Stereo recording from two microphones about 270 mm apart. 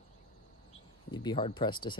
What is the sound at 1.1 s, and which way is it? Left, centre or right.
Speech, centre.